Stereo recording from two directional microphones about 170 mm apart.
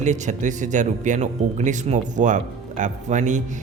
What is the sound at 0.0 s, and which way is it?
Speech, 45° right (ahead or behind).